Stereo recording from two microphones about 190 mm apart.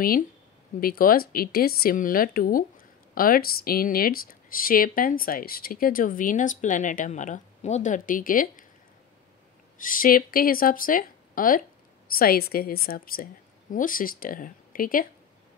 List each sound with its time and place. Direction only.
0.7 s speech: 50° left (ahead or behind)
9.8 s speech: 45° left (ahead or behind)